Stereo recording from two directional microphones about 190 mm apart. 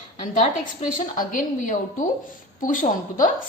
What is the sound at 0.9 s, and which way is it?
A woman's voice, 45° left (ahead or behind).